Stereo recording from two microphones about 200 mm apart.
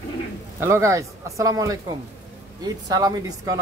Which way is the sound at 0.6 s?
15° right (ahead or behind).